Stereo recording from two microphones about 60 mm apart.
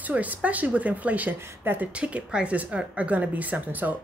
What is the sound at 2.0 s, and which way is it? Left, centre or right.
A woman's voice, right.